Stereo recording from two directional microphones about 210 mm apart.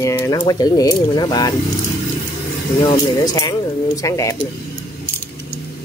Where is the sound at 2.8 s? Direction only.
15° left (ahead or behind).